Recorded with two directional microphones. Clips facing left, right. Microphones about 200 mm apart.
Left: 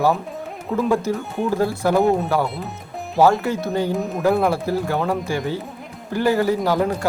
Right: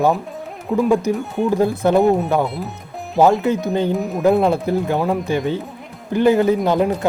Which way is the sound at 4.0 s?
Centre (ahead or behind).